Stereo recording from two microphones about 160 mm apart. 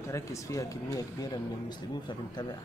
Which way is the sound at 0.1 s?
20° left (ahead or behind).